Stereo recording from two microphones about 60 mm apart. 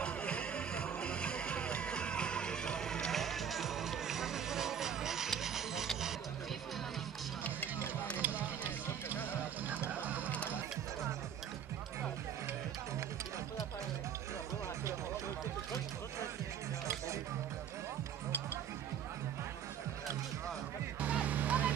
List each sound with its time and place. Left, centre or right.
0.0 s music: centre
8.2 s music: right
21.0 s music: right